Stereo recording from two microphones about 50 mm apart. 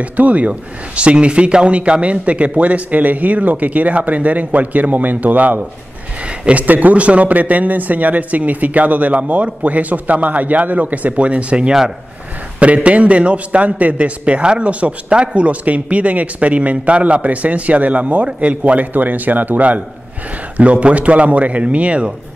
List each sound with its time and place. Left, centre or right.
0.0 s a man's voice: right
6.2 s a man's voice: right
6.6 s a man's voice: right